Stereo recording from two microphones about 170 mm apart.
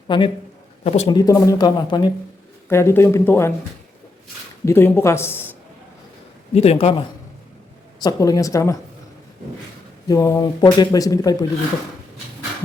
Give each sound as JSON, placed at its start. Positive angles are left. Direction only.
{"t": 0.1, "sound": "speech", "side_deg": 30}
{"t": 1.1, "sound": "speech", "side_deg": 20}
{"t": 2.6, "sound": "speech", "side_deg": 15}
{"t": 4.6, "sound": "speech", "side_deg": 15}
{"t": 6.5, "sound": "speech", "side_deg": 35}
{"t": 7.9, "sound": "speech", "side_deg": 20}
{"t": 10.1, "sound": "speech", "side_deg": 20}